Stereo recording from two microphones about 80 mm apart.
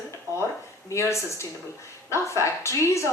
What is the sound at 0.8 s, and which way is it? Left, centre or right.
Speech, left.